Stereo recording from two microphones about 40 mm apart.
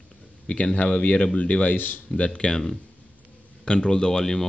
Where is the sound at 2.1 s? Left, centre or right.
Left.